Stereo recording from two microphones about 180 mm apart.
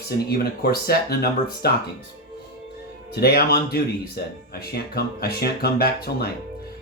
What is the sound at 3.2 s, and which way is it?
Speech, 60° left (ahead or behind).